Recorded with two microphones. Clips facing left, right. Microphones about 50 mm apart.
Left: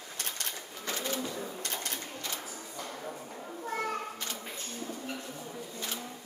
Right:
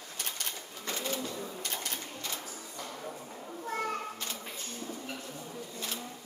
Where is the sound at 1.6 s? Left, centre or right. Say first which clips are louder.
Left 1 dB; centre.